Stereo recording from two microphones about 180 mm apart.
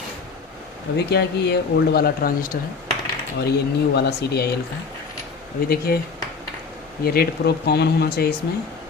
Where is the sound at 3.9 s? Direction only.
65° left (ahead or behind).